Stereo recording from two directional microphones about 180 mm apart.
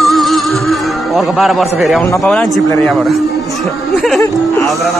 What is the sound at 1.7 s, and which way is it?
Speech, centre (ahead or behind).